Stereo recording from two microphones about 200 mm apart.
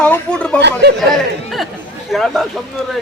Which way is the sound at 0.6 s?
60° right (ahead or behind).